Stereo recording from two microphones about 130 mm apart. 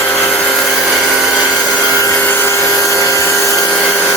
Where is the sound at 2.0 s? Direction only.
15° left (ahead or behind).